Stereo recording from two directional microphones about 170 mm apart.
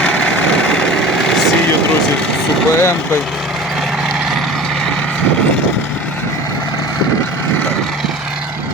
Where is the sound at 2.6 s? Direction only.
15° left (ahead or behind).